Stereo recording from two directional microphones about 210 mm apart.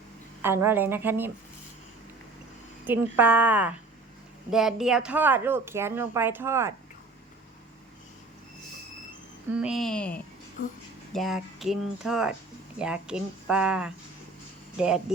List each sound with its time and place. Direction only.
0.4 s speech: 10° right (ahead or behind)
2.8 s speech: 10° right (ahead or behind)
9.5 s speech: 5° right (ahead or behind)